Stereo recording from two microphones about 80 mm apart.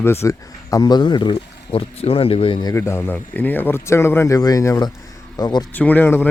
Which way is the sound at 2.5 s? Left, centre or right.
Left.